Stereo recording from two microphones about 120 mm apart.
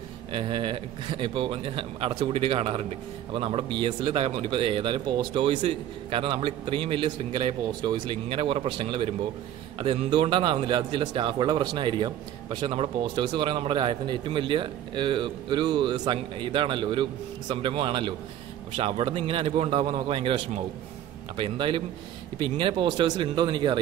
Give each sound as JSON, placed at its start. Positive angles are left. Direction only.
{"t": 0.3, "sound": "a man's voice", "side_deg": -45}